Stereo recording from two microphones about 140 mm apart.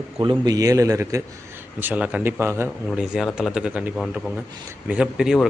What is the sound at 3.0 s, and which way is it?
A man's voice, 5° right (ahead or behind).